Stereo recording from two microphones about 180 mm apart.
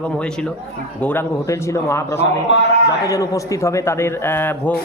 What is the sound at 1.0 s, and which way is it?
A man's voice, 10° left (ahead or behind).